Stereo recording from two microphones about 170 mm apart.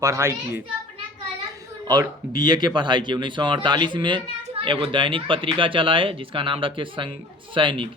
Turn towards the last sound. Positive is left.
turn(degrees=-30)  # may be behind; listen again after turning